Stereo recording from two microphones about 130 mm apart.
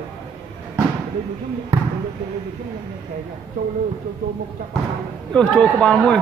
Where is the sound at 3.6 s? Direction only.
90° right.